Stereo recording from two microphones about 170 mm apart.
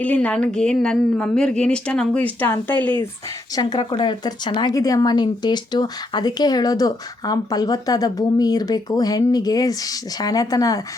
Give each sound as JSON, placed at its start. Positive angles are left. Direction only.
{"t": 0.0, "sound": "a woman's voice", "side_deg": 10}
{"t": 3.5, "sound": "speech", "side_deg": 25}